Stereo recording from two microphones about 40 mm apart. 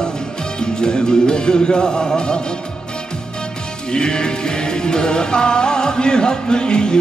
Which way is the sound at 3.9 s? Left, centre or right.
Centre.